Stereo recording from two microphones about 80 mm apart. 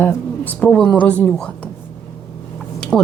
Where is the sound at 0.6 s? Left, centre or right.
Centre.